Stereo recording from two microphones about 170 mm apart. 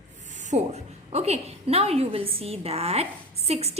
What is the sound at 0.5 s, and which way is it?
A woman's voice, 40° right (ahead or behind).